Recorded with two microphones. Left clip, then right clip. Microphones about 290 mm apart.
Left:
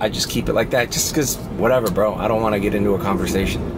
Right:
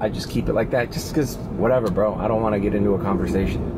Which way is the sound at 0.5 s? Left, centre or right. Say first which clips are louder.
Left 3 dB; centre.